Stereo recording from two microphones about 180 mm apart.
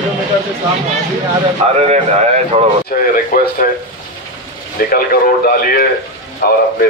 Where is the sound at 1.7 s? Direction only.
40° right (ahead or behind).